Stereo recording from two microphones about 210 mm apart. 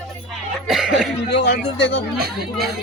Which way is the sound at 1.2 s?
55° left (ahead or behind).